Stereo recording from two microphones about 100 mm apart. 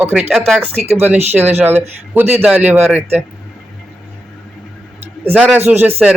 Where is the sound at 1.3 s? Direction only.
20° right (ahead or behind).